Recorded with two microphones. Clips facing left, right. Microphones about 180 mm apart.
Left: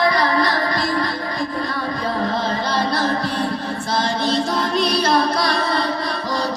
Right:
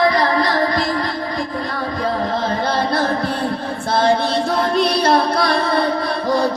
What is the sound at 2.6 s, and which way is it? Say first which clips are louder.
Music: right 2 dB; 55° right (ahead or behind).